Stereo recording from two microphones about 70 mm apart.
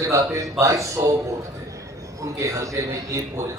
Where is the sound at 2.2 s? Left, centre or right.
Right.